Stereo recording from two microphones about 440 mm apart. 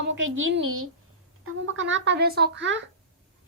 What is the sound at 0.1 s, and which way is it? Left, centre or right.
A woman's voice, right.